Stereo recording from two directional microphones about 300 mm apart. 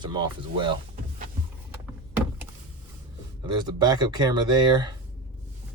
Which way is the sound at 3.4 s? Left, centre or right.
Centre.